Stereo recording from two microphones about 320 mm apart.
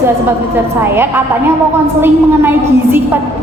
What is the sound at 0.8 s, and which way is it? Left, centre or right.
A woman's voice, centre.